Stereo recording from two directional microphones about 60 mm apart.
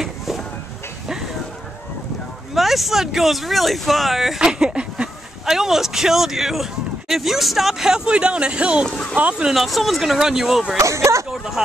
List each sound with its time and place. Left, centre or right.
2.5 s speech: centre
5.4 s speech: centre
9.6 s speech: centre
10.8 s speech: right
11.2 s speech: centre